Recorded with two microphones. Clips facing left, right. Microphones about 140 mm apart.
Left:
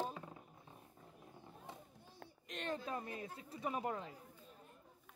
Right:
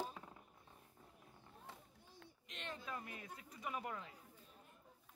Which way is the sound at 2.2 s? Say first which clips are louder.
Left 7 dB; 45° left (ahead or behind).